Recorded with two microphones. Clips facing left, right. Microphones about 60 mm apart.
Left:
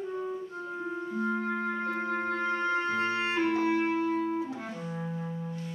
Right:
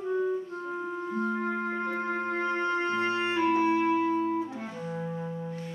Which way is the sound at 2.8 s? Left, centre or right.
Right.